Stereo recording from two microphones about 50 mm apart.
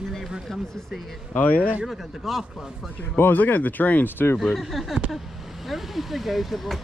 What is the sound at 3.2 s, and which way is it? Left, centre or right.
Speech, left.